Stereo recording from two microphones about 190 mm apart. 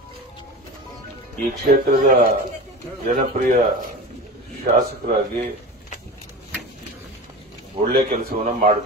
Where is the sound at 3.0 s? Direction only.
45° right (ahead or behind).